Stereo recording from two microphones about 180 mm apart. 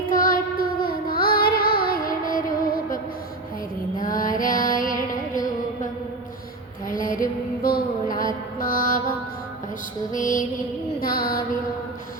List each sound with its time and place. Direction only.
0.1 s child singing: 50° left (ahead or behind)
4.0 s mantra: 50° left (ahead or behind)
6.8 s music: 50° left (ahead or behind)
7.6 s a sound: 55° left (ahead or behind)
8.1 s mantra: 50° left (ahead or behind)
10.2 s mantra: 45° left (ahead or behind)
11.0 s child singing: 55° left (ahead or behind)